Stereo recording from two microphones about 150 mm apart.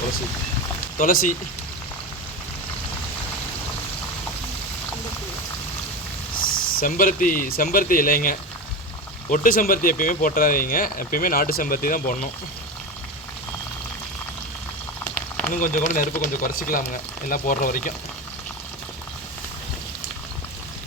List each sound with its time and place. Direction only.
0.9 s speech: 65° left (ahead or behind)
6.7 s speech: 65° left (ahead or behind)
15.1 s rain on surface: 10° left (ahead or behind)
15.5 s speech: 60° left (ahead or behind)